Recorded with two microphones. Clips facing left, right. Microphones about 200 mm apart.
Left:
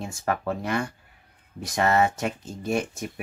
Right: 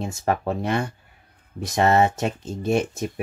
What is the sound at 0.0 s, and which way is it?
Speech, 25° right (ahead or behind).